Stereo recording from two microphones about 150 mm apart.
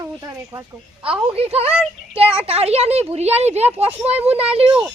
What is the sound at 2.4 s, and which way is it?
A woman's voice, 40° right (ahead or behind).